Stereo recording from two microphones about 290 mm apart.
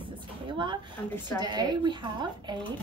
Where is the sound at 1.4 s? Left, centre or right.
Centre.